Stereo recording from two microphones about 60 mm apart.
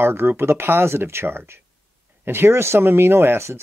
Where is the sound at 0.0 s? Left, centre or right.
Right.